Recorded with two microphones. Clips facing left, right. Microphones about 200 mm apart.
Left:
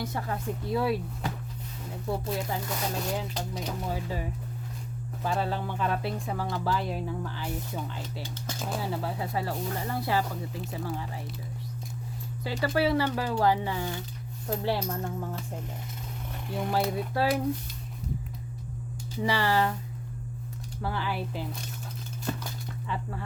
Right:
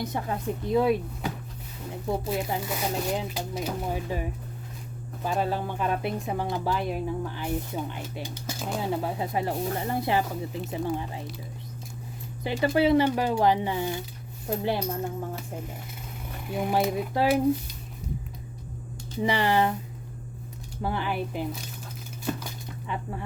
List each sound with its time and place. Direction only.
0.0 s speech: 20° right (ahead or behind)
2.0 s speech: 15° right (ahead or behind)
3.8 s speech: 15° right (ahead or behind)
12.4 s speech: 20° right (ahead or behind)
16.5 s speech: 5° right (ahead or behind)
19.2 s speech: 20° right (ahead or behind)
20.8 s speech: 20° right (ahead or behind)
22.2 s a sound: centre (ahead or behind)
22.4 s a sound: 20° right (ahead or behind)